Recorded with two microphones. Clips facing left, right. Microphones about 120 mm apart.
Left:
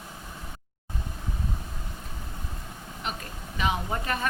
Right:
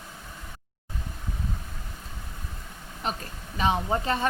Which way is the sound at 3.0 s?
35° right (ahead or behind).